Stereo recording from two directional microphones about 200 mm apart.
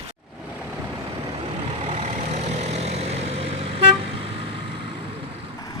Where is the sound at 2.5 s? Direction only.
35° right (ahead or behind).